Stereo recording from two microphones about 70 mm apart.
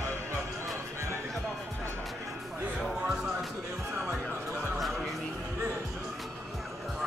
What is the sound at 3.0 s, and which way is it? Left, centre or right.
Music, centre.